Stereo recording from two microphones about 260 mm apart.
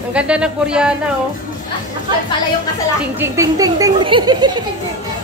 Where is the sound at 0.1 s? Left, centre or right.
Centre.